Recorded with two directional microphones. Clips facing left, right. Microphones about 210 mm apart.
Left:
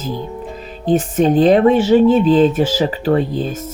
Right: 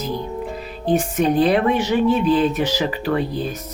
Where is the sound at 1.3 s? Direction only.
40° left (ahead or behind).